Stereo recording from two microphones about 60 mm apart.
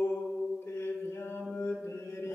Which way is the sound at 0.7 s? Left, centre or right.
Left.